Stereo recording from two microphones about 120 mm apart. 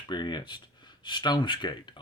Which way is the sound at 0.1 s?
40° left (ahead or behind).